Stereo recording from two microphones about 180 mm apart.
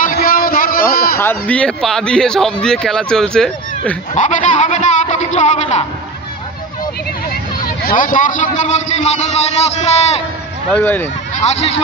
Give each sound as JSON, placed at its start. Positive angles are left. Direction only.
{"t": 0.0, "sound": "a sound", "side_deg": 55}
{"t": 1.2, "sound": "a man's voice", "side_deg": 10}
{"t": 4.1, "sound": "speech", "side_deg": 45}
{"t": 7.8, "sound": "a man's voice", "side_deg": 50}
{"t": 10.7, "sound": "speech", "side_deg": 10}
{"t": 11.3, "sound": "a man's voice", "side_deg": 35}